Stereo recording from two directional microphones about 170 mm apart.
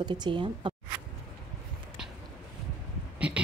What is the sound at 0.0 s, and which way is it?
Speech, 25° right (ahead or behind).